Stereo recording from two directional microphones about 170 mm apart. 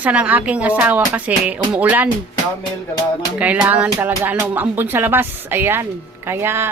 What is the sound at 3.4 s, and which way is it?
Speech, 10° right (ahead or behind).